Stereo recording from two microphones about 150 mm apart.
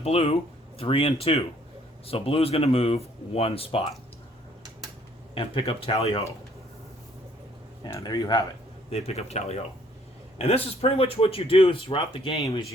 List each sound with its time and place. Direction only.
0.0 s a man's voice: 40° left (ahead or behind)
5.3 s speech: 35° left (ahead or behind)
7.9 s speech: 25° left (ahead or behind)
8.9 s a man's voice: 45° left (ahead or behind)